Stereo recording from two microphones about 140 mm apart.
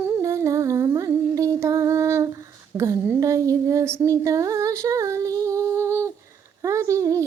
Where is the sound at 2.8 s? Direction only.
20° right (ahead or behind).